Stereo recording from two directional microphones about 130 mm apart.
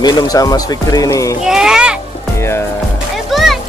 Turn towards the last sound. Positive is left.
turn(degrees=0)  # may be behind; listen again after turning